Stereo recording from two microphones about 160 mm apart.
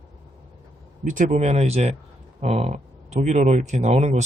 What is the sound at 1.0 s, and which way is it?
Speech, 50° right (ahead or behind).